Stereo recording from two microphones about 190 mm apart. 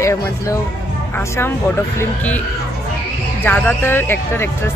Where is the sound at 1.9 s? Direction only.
10° left (ahead or behind).